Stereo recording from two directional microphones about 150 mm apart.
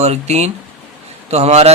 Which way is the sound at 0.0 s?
45° right (ahead or behind).